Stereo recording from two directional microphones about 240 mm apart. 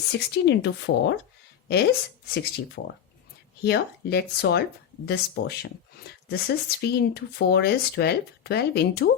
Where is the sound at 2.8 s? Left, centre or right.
Left.